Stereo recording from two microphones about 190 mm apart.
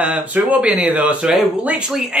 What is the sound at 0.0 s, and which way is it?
Speech, 5° right (ahead or behind).